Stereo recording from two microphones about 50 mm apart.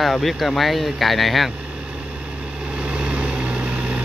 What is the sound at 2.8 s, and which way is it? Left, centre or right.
Vehicle, right.